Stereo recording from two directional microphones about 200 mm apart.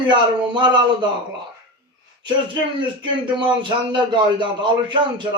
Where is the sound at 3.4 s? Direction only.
20° right (ahead or behind).